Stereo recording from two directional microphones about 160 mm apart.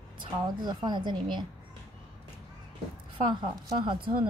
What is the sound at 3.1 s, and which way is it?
Speech, 25° right (ahead or behind).